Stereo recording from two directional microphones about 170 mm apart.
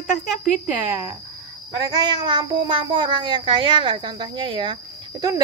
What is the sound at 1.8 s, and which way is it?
Speech, 25° right (ahead or behind).